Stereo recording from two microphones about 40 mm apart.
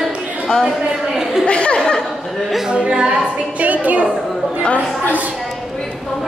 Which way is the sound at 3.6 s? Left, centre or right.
Right.